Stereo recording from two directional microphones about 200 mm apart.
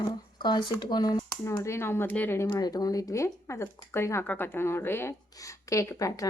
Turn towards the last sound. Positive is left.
turn(degrees=15)  # may be behind; listen again after turning